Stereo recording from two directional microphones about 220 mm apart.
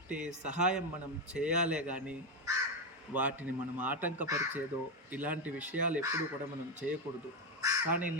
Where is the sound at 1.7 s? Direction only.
5° right (ahead or behind).